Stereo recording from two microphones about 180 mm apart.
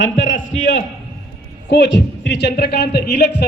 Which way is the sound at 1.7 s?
80° left.